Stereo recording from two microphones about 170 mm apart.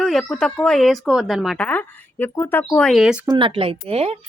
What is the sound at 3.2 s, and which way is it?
Speech, 30° right (ahead or behind).